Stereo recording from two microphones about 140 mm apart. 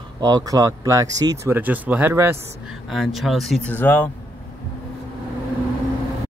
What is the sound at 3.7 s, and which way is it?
Speech, 10° left (ahead or behind).